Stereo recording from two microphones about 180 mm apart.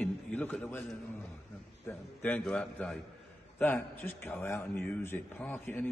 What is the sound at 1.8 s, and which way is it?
A man's voice, 10° left (ahead or behind).